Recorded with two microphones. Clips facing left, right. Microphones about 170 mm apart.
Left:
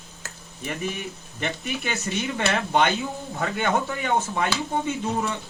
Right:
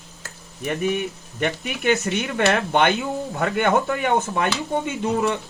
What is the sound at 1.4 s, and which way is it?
Speech, 65° right (ahead or behind).